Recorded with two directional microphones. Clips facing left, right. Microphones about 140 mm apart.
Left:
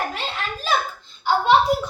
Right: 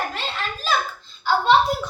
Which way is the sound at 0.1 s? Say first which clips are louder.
Even; 15° left (ahead or behind).